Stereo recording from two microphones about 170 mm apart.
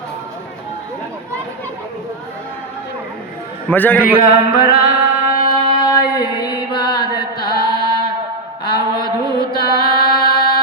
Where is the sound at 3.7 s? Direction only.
10° left (ahead or behind).